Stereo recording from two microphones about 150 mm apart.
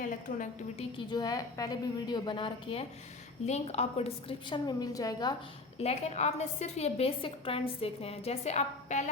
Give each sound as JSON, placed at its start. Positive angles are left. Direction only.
{"t": 0.0, "sound": "a woman's voice", "side_deg": 65}
{"t": 0.8, "sound": "a woman's voice", "side_deg": 30}
{"t": 3.4, "sound": "a woman's voice", "side_deg": 45}
{"t": 5.8, "sound": "a woman's voice", "side_deg": 45}